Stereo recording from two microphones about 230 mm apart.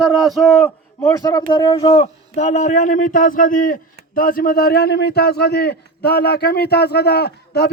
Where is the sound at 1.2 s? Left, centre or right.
Centre.